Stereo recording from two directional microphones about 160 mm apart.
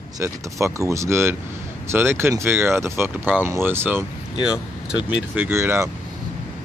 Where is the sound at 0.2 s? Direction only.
20° right (ahead or behind).